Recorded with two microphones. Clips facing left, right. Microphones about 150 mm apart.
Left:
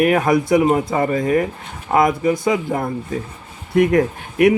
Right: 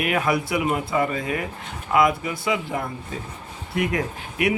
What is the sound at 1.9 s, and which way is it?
Mantra, 45° left (ahead or behind).